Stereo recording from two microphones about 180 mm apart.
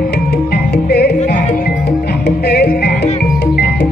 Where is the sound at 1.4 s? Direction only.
45° left (ahead or behind); by 3.9 s 65° left (ahead or behind).